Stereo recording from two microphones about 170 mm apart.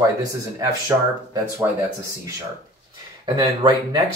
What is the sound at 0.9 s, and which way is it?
Speech, 20° right (ahead or behind).